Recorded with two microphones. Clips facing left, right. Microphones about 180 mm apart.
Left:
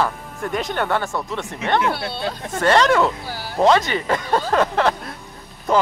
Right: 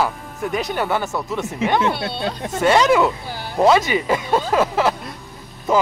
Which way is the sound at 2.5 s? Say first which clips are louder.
Right 1 dB; 5° right (ahead or behind).